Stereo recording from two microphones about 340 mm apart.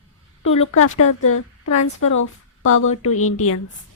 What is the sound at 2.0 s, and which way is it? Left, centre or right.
Speech, left.